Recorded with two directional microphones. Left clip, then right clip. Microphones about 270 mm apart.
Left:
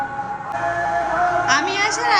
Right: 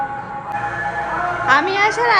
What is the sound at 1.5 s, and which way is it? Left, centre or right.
Speech, centre.